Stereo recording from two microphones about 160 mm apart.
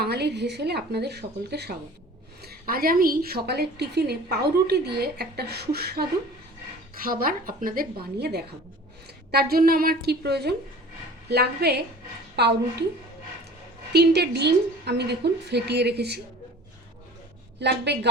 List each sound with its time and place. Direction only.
0.0 s a woman's voice: 90° right
2.4 s a woman's voice: 70° right (ahead or behind)
6.9 s speech: 65° right (ahead or behind); by 8.4 s 85° right
9.3 s a woman's voice: 70° right (ahead or behind); by 12.5 s 90° right
13.9 s a woman's voice: 90° right
17.6 s a woman's voice: 90° right